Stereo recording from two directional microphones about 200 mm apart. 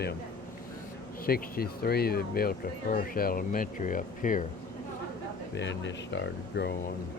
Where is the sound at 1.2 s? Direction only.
50° left (ahead or behind).